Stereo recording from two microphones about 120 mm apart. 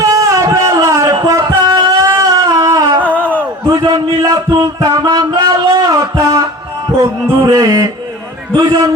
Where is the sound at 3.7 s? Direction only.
35° right (ahead or behind).